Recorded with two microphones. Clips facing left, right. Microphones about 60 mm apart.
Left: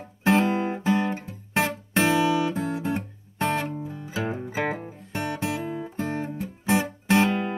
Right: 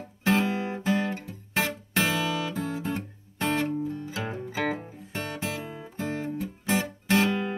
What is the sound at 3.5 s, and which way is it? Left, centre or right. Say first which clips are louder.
Music: right 2 dB; centre.